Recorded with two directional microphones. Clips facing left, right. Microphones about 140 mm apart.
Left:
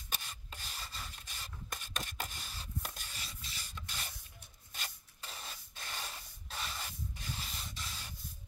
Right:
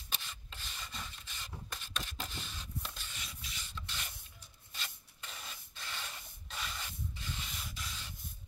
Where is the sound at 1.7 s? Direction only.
50° left (ahead or behind); by 6.9 s 30° left (ahead or behind).